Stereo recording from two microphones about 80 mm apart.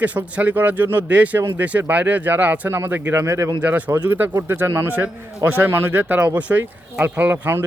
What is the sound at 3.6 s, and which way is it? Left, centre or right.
Speech, centre.